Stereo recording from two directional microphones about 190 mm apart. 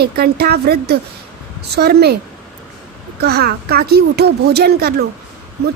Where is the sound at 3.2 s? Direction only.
55° right (ahead or behind).